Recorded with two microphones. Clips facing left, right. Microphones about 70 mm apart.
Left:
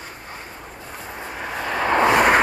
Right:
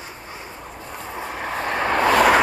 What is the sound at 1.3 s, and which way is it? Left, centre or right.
Vehicle, right.